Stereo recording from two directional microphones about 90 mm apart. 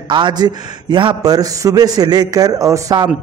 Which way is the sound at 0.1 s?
55° right (ahead or behind).